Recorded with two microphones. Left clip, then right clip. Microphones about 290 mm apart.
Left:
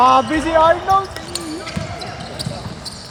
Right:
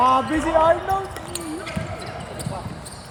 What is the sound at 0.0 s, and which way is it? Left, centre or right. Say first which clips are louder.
Speech: left 5 dB; centre.